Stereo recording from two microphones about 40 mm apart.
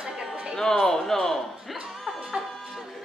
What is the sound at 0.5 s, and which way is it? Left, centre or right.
Speech, centre.